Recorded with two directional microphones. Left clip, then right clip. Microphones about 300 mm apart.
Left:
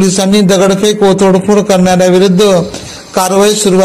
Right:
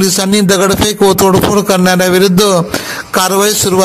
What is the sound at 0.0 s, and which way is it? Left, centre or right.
Speech, right.